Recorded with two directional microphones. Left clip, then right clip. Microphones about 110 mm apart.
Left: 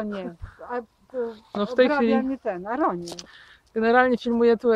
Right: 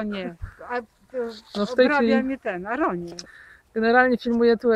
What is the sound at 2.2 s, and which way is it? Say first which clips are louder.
Speech: even; 75° left (ahead or behind).